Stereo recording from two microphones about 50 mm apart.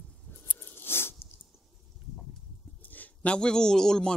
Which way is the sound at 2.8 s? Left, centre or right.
Left.